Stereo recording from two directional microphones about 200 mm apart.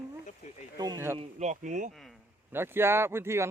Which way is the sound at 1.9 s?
Centre (ahead or behind).